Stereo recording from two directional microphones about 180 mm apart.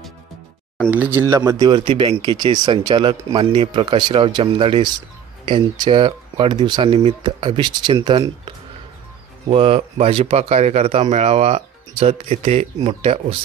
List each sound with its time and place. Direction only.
0.8 s speech: 10° right (ahead or behind); by 13.4 s 35° right (ahead or behind)